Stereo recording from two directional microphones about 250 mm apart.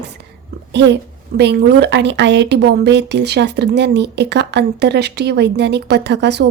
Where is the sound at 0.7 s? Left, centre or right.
Right.